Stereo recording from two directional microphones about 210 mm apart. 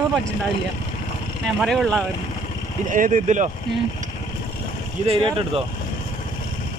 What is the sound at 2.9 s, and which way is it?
Speech, 40° right (ahead or behind).